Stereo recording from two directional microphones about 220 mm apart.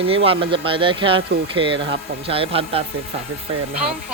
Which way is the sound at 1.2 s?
55° right (ahead or behind).